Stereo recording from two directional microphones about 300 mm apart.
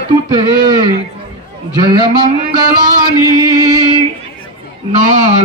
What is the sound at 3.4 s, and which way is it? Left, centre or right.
Chant, centre.